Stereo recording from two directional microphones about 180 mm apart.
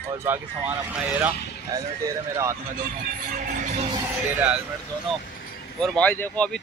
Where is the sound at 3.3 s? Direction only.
45° right (ahead or behind).